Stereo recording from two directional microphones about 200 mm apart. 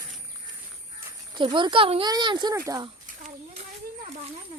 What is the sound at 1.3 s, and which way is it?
Speech, 20° right (ahead or behind).